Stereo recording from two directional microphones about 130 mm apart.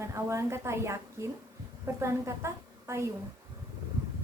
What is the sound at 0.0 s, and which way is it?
A woman's voice, 20° right (ahead or behind).